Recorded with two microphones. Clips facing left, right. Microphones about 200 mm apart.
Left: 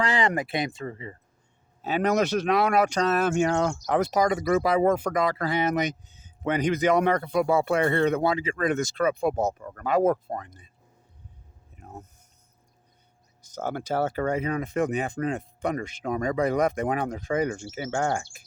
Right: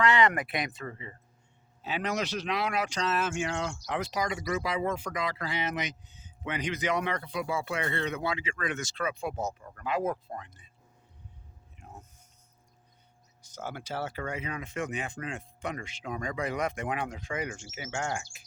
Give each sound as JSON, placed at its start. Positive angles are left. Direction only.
{"t": 0.0, "sound": "speech", "side_deg": 30}
{"t": 1.8, "sound": "speech", "side_deg": 45}
{"t": 13.6, "sound": "speech", "side_deg": 50}
{"t": 17.9, "sound": "speech", "side_deg": 55}